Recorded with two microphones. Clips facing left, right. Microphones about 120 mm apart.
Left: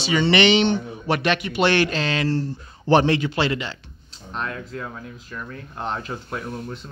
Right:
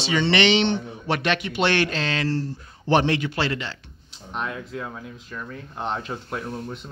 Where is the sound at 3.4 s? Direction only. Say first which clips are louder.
Left 3 dB; 15° left (ahead or behind).